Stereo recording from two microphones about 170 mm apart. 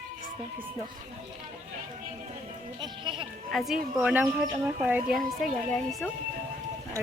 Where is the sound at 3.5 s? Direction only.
Centre (ahead or behind).